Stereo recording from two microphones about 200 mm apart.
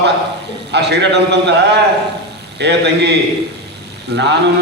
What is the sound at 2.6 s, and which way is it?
Speech, 60° right (ahead or behind).